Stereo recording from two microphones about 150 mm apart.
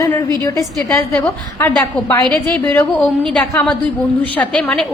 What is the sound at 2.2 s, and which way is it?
A woman's voice, 10° left (ahead or behind).